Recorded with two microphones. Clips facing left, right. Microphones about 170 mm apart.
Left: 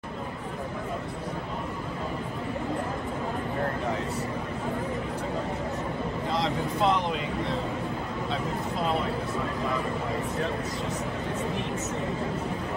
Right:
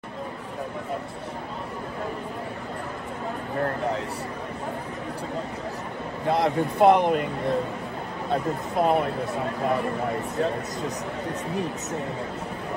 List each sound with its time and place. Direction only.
6.2 s speech: 60° right (ahead or behind)